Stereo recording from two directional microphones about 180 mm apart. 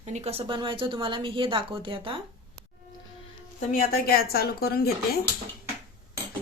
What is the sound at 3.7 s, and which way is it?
Speech, 55° left (ahead or behind).